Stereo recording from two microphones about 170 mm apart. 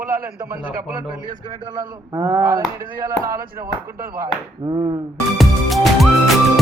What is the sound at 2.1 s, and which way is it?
Speech, 15° right (ahead or behind).